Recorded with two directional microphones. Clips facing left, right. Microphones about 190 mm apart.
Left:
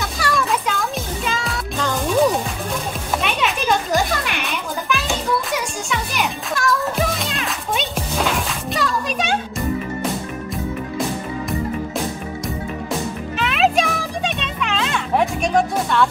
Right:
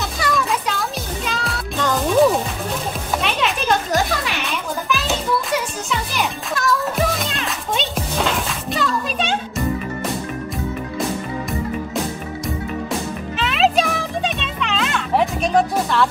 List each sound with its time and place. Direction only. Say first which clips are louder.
0.0 s music: even; centre (ahead or behind)
13.4 s music: even; centre (ahead or behind)